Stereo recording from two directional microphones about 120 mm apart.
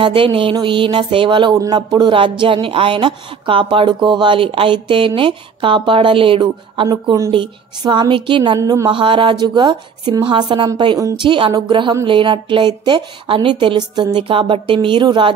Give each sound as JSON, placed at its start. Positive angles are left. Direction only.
{"t": 0.0, "sound": "speech", "side_deg": -45}
{"t": 8.5, "sound": "speech", "side_deg": -30}